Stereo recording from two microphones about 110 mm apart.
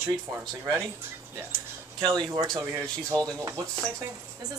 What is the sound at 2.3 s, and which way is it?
A woman's voice, 35° right (ahead or behind).